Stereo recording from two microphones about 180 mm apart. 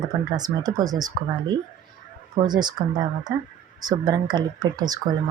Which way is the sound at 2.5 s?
25° right (ahead or behind).